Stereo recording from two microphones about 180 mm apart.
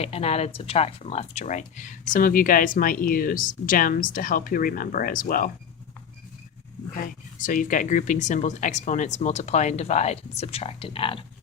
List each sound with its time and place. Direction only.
0.0 s speech: 35° left (ahead or behind); by 5.5 s 50° left (ahead or behind)
6.9 s speech: 50° left (ahead or behind); by 11.2 s 30° left (ahead or behind)